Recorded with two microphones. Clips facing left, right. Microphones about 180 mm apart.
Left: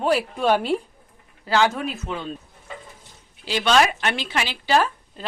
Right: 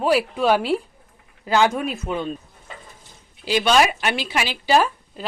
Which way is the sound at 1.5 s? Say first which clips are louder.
Right 2 dB; 15° right (ahead or behind).